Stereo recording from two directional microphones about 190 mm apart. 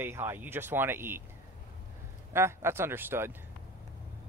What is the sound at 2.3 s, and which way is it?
Speech, 15° right (ahead or behind).